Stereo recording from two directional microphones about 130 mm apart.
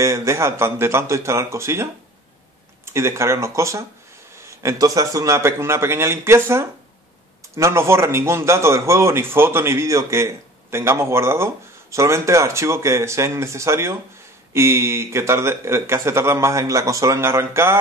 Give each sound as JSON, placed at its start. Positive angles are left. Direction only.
{"t": 0.0, "sound": "a man's voice", "side_deg": -25}